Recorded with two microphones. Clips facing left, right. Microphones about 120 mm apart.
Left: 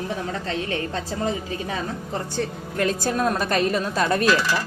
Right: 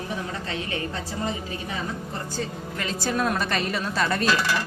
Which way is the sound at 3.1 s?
35° left (ahead or behind).